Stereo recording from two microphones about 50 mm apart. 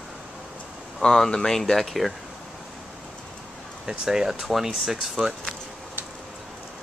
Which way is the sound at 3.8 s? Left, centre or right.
Centre.